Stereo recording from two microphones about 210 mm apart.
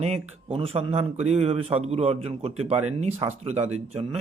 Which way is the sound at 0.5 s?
25° right (ahead or behind).